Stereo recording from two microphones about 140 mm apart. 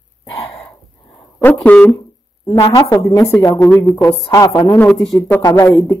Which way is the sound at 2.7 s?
25° left (ahead or behind).